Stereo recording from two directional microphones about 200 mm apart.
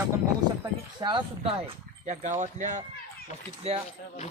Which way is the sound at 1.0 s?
25° right (ahead or behind).